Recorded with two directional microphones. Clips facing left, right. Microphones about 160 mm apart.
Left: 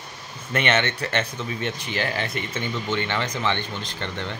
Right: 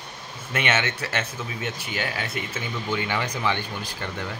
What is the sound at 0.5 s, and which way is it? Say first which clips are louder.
Speech: left 3 dB; 5° right (ahead or behind).